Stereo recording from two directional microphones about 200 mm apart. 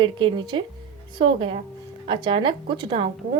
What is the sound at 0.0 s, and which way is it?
A woman's voice, 25° right (ahead or behind).